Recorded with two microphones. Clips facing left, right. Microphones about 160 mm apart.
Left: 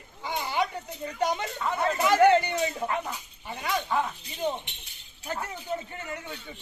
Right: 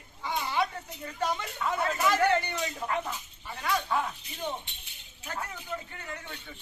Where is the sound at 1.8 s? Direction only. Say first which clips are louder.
Left 6 dB; 20° left (ahead or behind).